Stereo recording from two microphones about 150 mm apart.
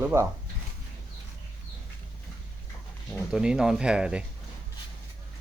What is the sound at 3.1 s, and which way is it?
Speech, 5° right (ahead or behind).